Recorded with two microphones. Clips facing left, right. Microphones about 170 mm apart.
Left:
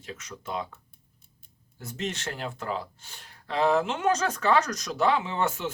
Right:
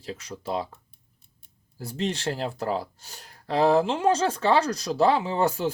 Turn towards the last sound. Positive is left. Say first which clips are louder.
# right 5 dB
turn(degrees=-35)  # may be behind; listen again after turning